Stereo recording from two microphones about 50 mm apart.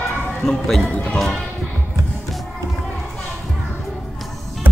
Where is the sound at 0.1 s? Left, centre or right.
Centre.